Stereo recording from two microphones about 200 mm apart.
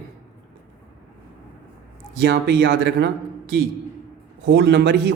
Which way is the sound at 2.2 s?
60° right (ahead or behind).